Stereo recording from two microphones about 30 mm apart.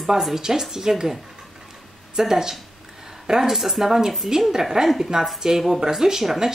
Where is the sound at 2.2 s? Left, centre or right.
Centre.